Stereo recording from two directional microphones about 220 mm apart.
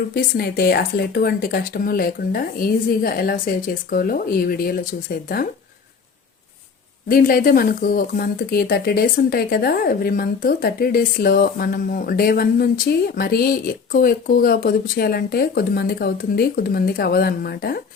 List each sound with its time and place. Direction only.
0.1 s speech: 40° left (ahead or behind)
7.1 s speech: 40° left (ahead or behind)